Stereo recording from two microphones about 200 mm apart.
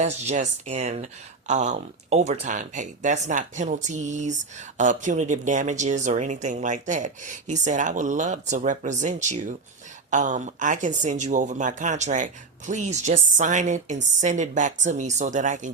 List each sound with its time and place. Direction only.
0.0 s speech: 35° right (ahead or behind)